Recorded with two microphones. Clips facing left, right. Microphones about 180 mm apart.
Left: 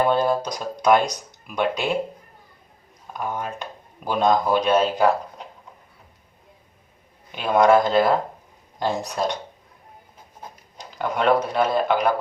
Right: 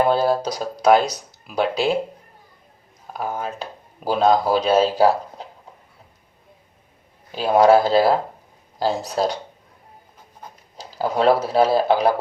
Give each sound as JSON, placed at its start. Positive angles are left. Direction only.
{"t": 0.3, "sound": "speech", "side_deg": -35}
{"t": 3.1, "sound": "speech", "side_deg": -35}
{"t": 7.3, "sound": "speech", "side_deg": -30}
{"t": 10.9, "sound": "speech", "side_deg": -35}